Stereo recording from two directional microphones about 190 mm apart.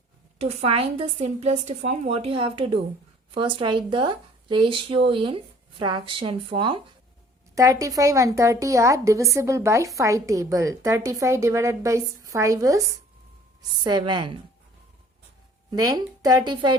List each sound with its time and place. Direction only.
0.3 s a woman's voice: 35° right (ahead or behind)
15.7 s speech: 20° right (ahead or behind)